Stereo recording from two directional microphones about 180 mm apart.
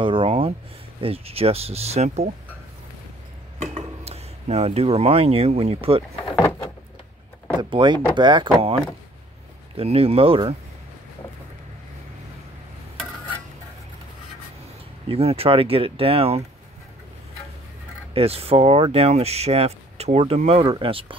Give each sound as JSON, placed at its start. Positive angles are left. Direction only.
{"t": 0.0, "sound": "a sound", "side_deg": -30}
{"t": 1.0, "sound": "speech", "side_deg": -35}
{"t": 3.7, "sound": "speech", "side_deg": -35}
{"t": 7.7, "sound": "speech", "side_deg": -25}
{"t": 9.8, "sound": "speech", "side_deg": -35}
{"t": 15.0, "sound": "speech", "side_deg": -35}
{"t": 18.1, "sound": "speech", "side_deg": -35}